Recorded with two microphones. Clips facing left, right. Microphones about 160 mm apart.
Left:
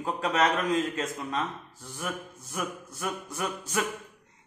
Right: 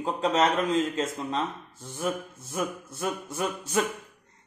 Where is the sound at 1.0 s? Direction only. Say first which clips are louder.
Right 2 dB; 25° right (ahead or behind).